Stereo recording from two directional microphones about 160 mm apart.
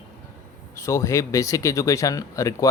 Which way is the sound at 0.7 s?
20° left (ahead or behind).